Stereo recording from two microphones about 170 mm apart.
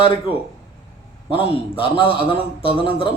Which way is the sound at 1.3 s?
30° left (ahead or behind).